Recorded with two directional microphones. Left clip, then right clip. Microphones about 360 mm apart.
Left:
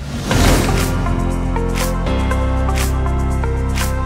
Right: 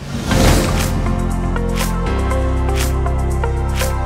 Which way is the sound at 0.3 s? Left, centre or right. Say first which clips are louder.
Even; centre.